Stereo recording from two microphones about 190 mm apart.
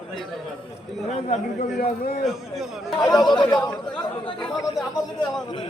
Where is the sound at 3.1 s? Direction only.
20° left (ahead or behind).